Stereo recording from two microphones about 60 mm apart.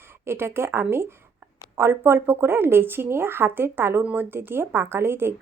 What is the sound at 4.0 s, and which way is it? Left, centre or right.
Speech, right.